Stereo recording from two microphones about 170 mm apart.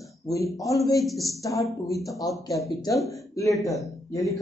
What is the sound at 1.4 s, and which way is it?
A man's voice, 20° left (ahead or behind).